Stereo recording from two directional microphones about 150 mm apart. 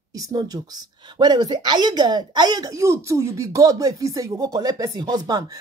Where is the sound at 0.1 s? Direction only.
25° right (ahead or behind).